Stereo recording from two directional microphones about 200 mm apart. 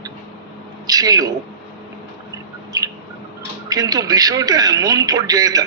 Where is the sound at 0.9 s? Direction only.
20° right (ahead or behind).